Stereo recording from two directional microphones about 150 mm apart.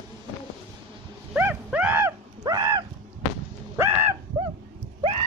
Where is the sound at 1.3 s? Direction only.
10° right (ahead or behind).